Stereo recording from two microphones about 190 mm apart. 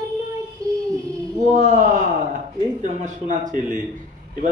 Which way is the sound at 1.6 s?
40° right (ahead or behind).